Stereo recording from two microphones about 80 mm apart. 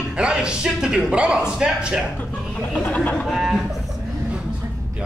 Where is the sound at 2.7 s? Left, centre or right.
Centre.